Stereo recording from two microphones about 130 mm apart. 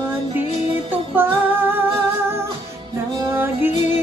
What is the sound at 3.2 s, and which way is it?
Music, 15° right (ahead or behind).